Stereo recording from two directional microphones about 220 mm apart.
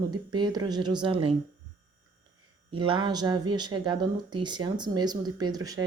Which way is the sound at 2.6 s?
25° right (ahead or behind).